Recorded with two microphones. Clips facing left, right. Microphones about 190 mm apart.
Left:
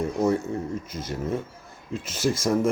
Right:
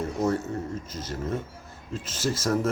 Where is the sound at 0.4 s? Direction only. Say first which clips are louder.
Left 2 dB; 10° left (ahead or behind).